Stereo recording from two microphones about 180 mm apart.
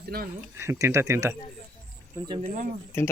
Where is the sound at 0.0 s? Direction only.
55° right (ahead or behind).